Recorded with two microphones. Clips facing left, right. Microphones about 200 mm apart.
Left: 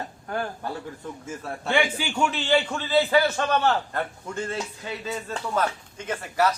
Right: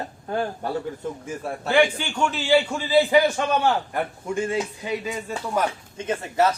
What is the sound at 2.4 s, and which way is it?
A man's voice, 10° right (ahead or behind).